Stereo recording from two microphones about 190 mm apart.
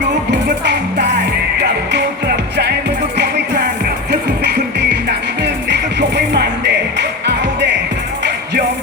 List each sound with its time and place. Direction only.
0.3 s music: 65° right (ahead or behind)